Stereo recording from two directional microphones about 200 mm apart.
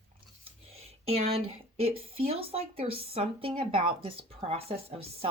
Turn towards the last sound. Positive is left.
turn(degrees=-30)  # may be behind; listen again after turning